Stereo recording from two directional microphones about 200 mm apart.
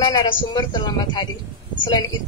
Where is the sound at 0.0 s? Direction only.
20° left (ahead or behind).